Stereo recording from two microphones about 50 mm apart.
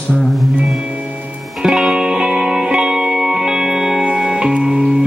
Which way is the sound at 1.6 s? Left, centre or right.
Centre.